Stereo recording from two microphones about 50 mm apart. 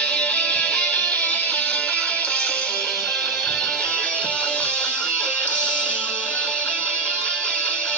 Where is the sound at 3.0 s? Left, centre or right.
Centre.